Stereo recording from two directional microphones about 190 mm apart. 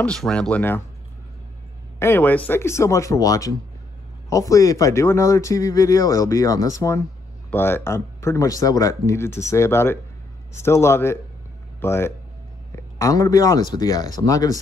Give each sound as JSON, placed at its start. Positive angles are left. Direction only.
{"t": 0.0, "sound": "speech", "side_deg": 5}
{"t": 2.0, "sound": "speech", "side_deg": 10}